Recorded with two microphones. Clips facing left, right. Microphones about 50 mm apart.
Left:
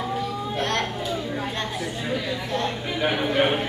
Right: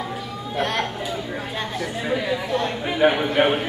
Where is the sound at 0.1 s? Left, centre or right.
Centre.